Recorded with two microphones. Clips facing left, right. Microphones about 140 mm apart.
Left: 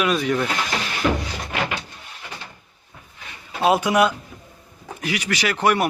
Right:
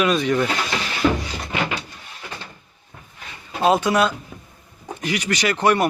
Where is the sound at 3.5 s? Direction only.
10° left (ahead or behind).